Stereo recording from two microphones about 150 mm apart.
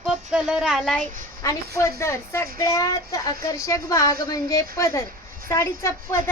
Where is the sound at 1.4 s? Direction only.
20° left (ahead or behind).